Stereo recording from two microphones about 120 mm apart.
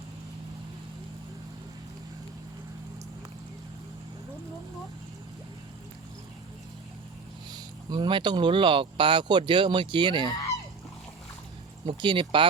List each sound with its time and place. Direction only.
7.5 s speech: 35° right (ahead or behind)
11.9 s speech: 40° right (ahead or behind)